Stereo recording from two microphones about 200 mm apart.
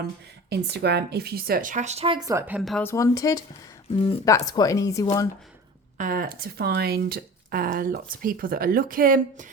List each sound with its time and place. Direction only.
0.5 s speech: 55° right (ahead or behind); by 2.6 s 15° right (ahead or behind)
2.6 s speech: centre (ahead or behind)
2.8 s a woman's voice: 15° left (ahead or behind)
6.0 s speech: 45° right (ahead or behind)